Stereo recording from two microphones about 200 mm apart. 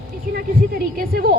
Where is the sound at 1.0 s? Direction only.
50° right (ahead or behind).